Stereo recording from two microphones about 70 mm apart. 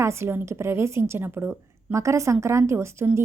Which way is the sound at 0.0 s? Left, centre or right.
Right.